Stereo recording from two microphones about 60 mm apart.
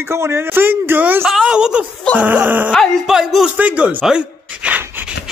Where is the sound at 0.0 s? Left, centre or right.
Right.